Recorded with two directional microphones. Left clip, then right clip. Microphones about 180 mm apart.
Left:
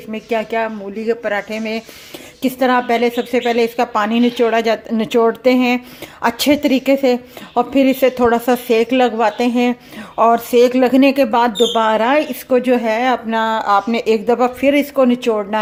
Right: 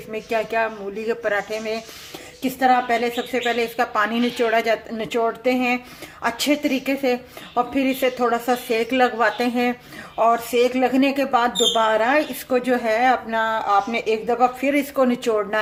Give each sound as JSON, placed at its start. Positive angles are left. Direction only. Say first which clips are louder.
{"t": 0.1, "sound": "speech", "louder": "left 4 dB", "side_deg": 30}